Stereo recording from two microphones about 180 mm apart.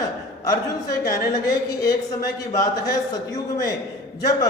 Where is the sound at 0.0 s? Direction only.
20° left (ahead or behind).